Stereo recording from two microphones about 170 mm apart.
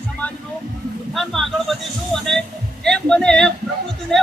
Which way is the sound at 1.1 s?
Centre (ahead or behind).